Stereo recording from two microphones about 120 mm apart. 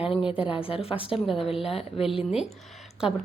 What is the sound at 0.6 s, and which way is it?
Speech, 50° left (ahead or behind).